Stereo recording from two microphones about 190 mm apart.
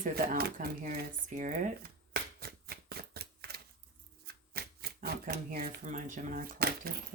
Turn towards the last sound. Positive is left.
turn(degrees=-50)  # may be behind; listen again after turning